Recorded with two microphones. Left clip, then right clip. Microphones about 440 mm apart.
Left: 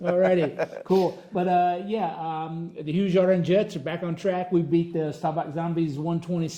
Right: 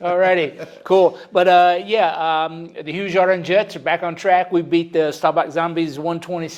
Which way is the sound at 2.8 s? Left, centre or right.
Right.